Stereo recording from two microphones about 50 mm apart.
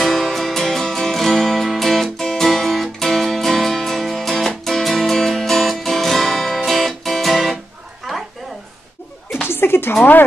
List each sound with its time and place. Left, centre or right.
0.0 s music: centre
8.1 s a sound: centre
9.5 s music: left